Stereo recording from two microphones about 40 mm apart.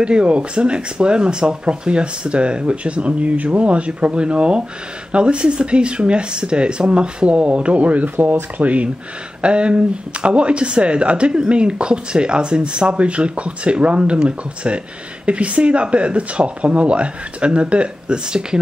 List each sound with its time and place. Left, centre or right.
0.0 s speech: right
8.2 s speech: right
8.6 s speech: right
9.4 s speech: right